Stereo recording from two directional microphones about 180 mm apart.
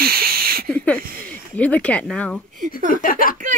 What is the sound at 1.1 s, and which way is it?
Speech, 50° right (ahead or behind).